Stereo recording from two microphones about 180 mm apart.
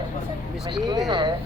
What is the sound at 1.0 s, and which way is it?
Speech, 25° right (ahead or behind).